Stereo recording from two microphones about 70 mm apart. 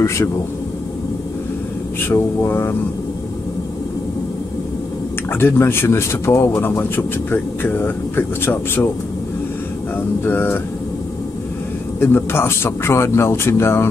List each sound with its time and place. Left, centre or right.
0.0 s speech: left
2.0 s speech: left
5.3 s speech: left
10.2 s speech: left
12.0 s speech: left